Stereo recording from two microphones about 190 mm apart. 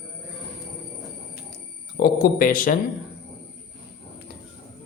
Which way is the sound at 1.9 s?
50° left (ahead or behind).